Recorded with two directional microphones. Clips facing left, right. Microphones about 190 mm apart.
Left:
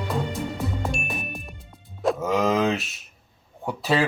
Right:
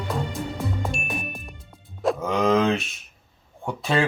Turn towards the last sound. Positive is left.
turn(degrees=5)  # may be behind; listen again after turning